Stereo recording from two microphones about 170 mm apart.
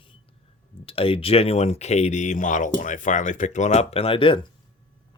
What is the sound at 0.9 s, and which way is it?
Speech, 35° left (ahead or behind).